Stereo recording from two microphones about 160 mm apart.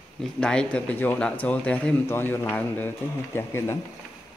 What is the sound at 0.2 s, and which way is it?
A man's voice, 5° left (ahead or behind).